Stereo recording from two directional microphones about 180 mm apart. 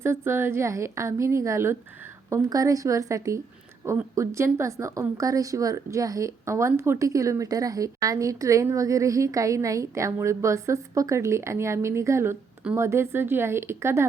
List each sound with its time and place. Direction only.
0.0 s a woman's voice: 15° right (ahead or behind)